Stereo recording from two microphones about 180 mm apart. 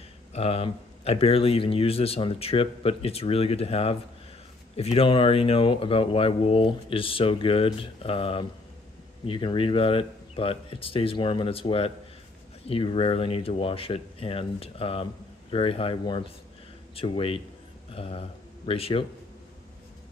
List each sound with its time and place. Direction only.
0.3 s speech: 35° left (ahead or behind)